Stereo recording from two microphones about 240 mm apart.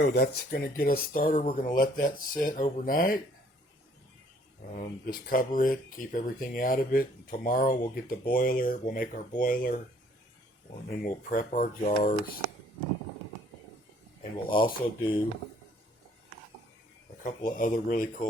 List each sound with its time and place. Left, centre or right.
0.0 s speech: left
4.7 s speech: left
10.8 s speech: left
14.4 s speech: centre
17.2 s speech: left